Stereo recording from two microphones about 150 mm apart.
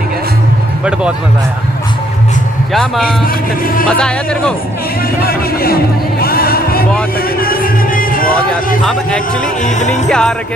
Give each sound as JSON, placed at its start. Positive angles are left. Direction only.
{"t": 2.7, "sound": "a man's voice", "side_deg": 0}
{"t": 5.2, "sound": "speech", "side_deg": 90}
{"t": 6.2, "sound": "music", "side_deg": 90}
{"t": 7.3, "sound": "music", "side_deg": 75}
{"t": 9.8, "sound": "a man's voice", "side_deg": 5}